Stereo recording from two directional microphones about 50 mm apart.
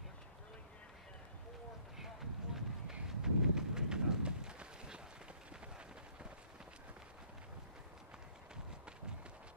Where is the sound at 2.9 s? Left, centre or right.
Centre.